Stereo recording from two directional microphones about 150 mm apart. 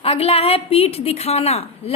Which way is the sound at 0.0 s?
40° left (ahead or behind).